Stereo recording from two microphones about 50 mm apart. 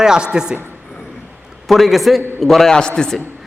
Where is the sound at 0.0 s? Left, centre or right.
Centre.